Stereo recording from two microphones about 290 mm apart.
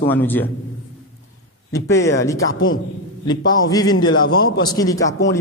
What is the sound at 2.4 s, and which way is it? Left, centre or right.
Speech, left.